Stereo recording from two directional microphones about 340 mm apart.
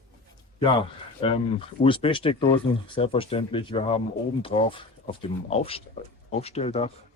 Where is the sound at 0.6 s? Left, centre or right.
Centre.